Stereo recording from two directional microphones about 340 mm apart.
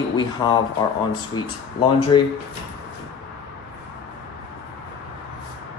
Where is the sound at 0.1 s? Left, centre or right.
Centre.